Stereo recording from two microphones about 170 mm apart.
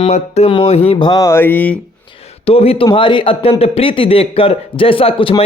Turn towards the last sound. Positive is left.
turn(degrees=30)  # may be behind; listen again after turning